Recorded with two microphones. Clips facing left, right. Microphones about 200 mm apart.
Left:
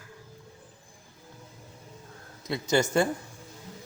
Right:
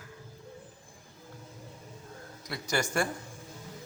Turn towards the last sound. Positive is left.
turn(degrees=25)  # may be behind; listen again after turning